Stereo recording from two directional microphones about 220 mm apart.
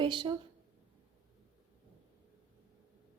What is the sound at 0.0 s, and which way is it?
Speech, 20° right (ahead or behind).